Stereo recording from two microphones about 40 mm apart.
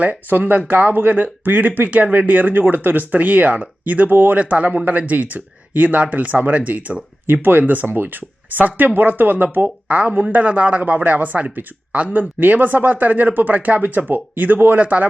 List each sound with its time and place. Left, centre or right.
0.3 s speech: right
4.4 s speech: right
6.3 s speech: right
6.6 s speech: right
7.9 s speech: right
8.5 s speech: right
9.9 s speech: right
12.4 s speech: right
14.8 s speech: right